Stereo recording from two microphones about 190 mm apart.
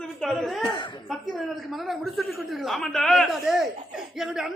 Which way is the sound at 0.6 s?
25° left (ahead or behind).